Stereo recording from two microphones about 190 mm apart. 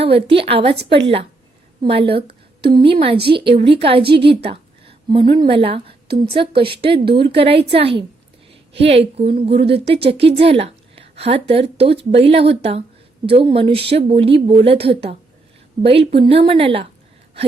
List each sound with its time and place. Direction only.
0.0 s a woman's voice: 30° right (ahead or behind)
4.5 s a sound: 30° right (ahead or behind)
5.3 s a woman's voice: 25° right (ahead or behind)
15.8 s a woman's voice: 30° right (ahead or behind)